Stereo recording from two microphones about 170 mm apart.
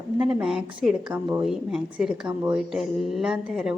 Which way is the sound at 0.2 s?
5° right (ahead or behind).